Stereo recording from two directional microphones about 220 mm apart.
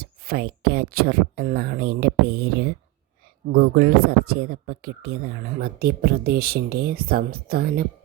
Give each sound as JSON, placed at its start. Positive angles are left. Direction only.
{"t": 0.0, "sound": "speech", "side_deg": -45}